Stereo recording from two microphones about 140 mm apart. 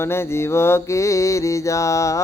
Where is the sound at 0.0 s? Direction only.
15° left (ahead or behind).